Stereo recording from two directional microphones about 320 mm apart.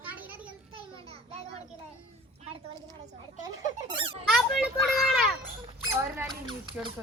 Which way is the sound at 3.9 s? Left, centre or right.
Centre.